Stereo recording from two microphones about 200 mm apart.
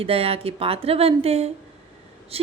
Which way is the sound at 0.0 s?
30° right (ahead or behind).